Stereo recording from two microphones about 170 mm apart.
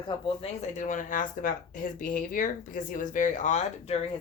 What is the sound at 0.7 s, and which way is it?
Speech, 45° left (ahead or behind).